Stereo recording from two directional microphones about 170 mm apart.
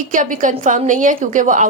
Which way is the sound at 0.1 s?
50° right (ahead or behind).